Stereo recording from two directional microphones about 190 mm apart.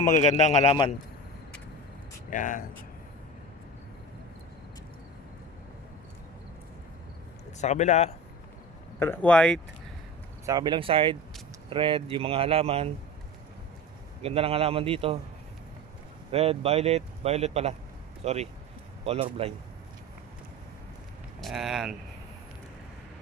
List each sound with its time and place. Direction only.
0.4 s speech: 35° left (ahead or behind)
2.3 s speech: 45° left (ahead or behind)
7.6 s speech: 40° left (ahead or behind)
9.0 s speech: 10° left (ahead or behind)
10.4 s speech: 20° right (ahead or behind)
14.2 s speech: 30° right (ahead or behind)
16.3 s speech: 30° right (ahead or behind)
21.4 s speech: centre (ahead or behind)